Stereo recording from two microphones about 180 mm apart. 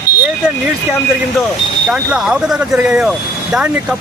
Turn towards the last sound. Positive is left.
turn(degrees=-5)  # may be behind; listen again after turning